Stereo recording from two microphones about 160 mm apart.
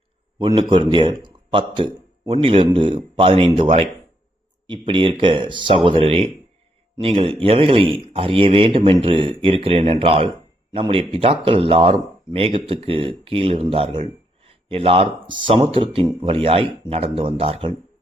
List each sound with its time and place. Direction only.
0.3 s a man's voice: 30° right (ahead or behind)
13.9 s a sound: 40° right (ahead or behind)
15.3 s speech: 30° right (ahead or behind)